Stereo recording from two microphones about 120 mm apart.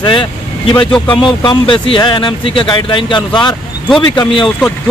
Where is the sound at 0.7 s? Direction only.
10° left (ahead or behind).